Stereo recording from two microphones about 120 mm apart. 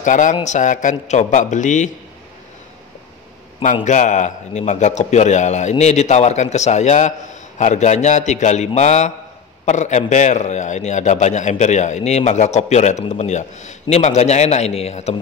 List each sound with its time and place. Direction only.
0.0 s a man's voice: 90° left
3.8 s a man's voice: 90° left; by 15.1 s 65° left (ahead or behind)